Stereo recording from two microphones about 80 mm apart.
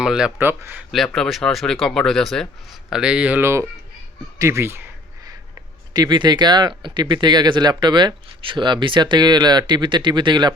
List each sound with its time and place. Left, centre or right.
0.0 s speech: centre
0.3 s a man's voice: right
0.9 s speech: centre
2.9 s speech: centre
3.4 s speech: right
5.9 s speech: right